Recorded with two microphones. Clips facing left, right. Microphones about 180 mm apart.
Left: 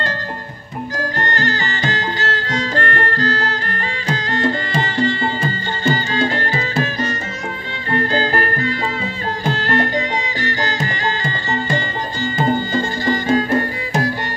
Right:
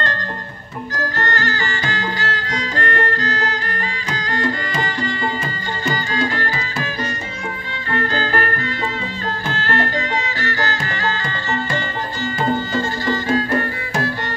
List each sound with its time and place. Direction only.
0.9 s music: 15° left (ahead or behind)
9.6 s music: 15° left (ahead or behind)